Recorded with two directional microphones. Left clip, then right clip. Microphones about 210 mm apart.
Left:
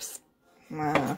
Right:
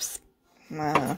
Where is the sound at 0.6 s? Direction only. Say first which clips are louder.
Right 1 dB; 20° right (ahead or behind).